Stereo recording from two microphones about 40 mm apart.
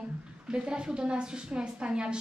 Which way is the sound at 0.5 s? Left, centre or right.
Right.